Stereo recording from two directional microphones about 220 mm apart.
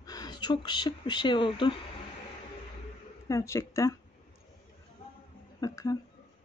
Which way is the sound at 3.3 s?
15° left (ahead or behind).